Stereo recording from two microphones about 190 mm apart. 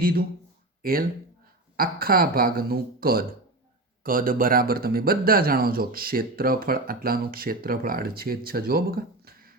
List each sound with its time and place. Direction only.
0.0 s speech: 50° right (ahead or behind)